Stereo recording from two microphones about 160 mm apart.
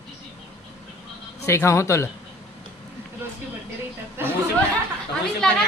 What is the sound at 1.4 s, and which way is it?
Speech, 15° left (ahead or behind).